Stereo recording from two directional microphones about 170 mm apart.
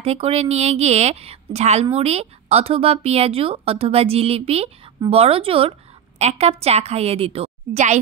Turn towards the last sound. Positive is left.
turn(degrees=-40)  # may be behind; listen again after turning